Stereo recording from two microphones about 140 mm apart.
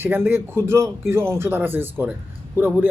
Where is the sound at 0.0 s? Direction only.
15° right (ahead or behind).